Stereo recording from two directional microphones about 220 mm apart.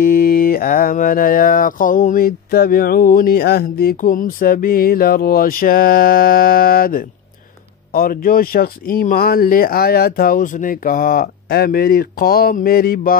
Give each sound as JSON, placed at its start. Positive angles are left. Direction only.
{"t": 0.0, "sound": "mantra", "side_deg": 40}